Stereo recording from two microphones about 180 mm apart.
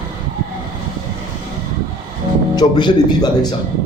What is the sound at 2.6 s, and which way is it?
Speech, 25° left (ahead or behind).